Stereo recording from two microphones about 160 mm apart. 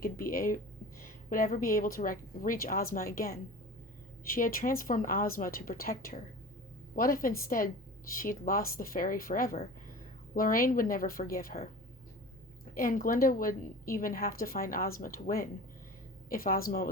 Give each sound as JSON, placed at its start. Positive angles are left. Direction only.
{"t": 0.0, "sound": "a woman's voice", "side_deg": 65}
{"t": 12.7, "sound": "a woman's voice", "side_deg": 60}